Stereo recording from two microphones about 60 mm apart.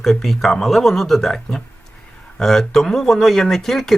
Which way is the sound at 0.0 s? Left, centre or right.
Centre.